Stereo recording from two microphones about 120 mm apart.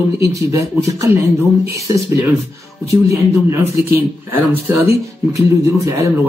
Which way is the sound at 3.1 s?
25° right (ahead or behind).